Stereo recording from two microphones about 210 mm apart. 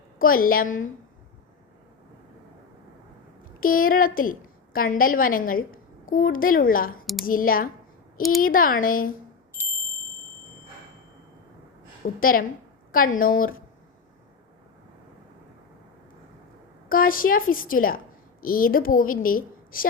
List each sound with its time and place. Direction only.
0.2 s a woman's voice: 40° left (ahead or behind)
3.6 s a woman's voice: 40° left (ahead or behind)
12.0 s a woman's voice: 45° left (ahead or behind)
16.9 s a woman's voice: 40° left (ahead or behind)